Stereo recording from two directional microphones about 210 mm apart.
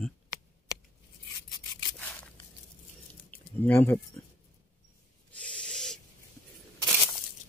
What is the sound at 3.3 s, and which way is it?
Squish, 10° left (ahead or behind).